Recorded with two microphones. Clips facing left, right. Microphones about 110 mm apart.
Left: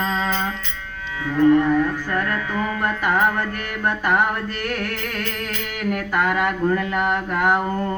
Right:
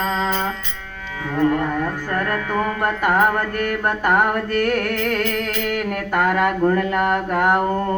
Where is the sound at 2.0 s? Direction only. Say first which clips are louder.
Right 1 dB; 45° right (ahead or behind).